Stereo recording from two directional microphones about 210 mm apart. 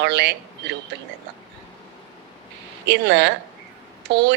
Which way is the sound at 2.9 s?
55° right (ahead or behind).